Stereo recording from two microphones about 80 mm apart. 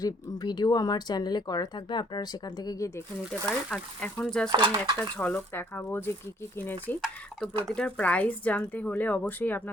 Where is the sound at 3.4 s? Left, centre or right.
Centre.